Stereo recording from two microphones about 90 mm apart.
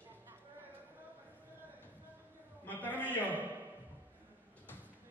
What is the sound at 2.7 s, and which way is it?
Speech, 20° left (ahead or behind).